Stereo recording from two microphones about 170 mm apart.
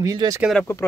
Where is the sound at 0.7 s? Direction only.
15° left (ahead or behind).